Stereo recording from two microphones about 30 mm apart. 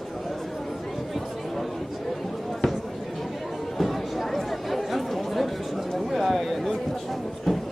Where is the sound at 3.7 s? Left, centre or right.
Centre.